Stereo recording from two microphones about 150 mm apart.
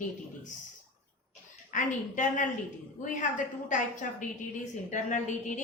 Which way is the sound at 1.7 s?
55° left (ahead or behind).